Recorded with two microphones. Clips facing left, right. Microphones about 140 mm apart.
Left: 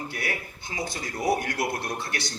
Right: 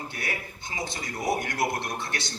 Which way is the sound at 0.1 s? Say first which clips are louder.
Left 2 dB; 25° right (ahead or behind).